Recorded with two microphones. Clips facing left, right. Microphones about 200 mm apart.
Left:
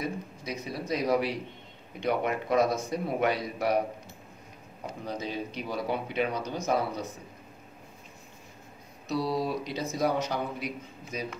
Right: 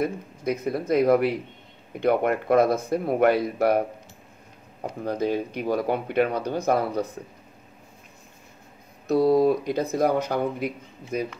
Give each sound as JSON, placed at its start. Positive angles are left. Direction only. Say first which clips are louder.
{"t": 0.0, "sound": "speech", "louder": "right 8 dB", "side_deg": -55}
{"t": 5.0, "sound": "speech", "louder": "right 9 dB", "side_deg": -55}
{"t": 9.0, "sound": "speech", "louder": "right 11 dB", "side_deg": -55}